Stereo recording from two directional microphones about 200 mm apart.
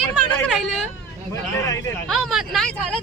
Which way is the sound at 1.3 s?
15° left (ahead or behind).